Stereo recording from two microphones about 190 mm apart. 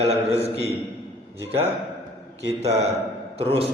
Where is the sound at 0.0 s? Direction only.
35° right (ahead or behind).